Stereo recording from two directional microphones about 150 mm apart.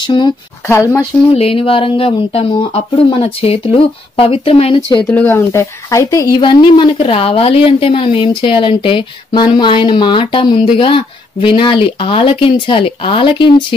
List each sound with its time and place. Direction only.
0.0 s speech: 30° left (ahead or behind)
0.7 s speech: 20° left (ahead or behind)
1.3 s speech: 40° left (ahead or behind)
5.1 s speech: 15° left (ahead or behind); by 13.7 s 35° left (ahead or behind)